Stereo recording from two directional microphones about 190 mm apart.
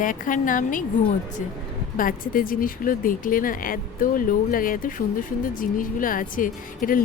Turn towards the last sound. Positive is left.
turn(degrees=45)  # may be behind; listen again after turning